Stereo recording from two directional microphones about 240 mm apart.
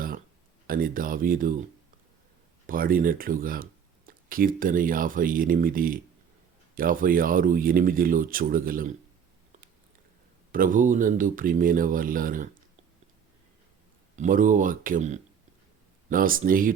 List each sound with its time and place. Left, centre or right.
0.7 s speech: right
2.6 s speech: right
10.5 s speech: right
14.2 s speech: right